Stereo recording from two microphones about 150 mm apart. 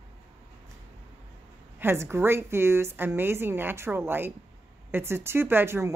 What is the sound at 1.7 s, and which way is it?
A woman's voice, 15° right (ahead or behind).